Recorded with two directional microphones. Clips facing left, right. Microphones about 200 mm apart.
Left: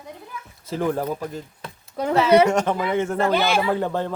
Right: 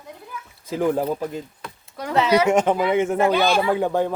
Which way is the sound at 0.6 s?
15° right (ahead or behind).